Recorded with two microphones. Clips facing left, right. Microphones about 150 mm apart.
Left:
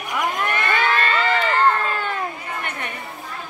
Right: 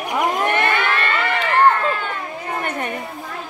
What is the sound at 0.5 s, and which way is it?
Crowd, 65° right (ahead or behind).